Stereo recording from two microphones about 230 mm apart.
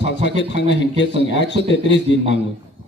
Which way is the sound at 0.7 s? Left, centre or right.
Left.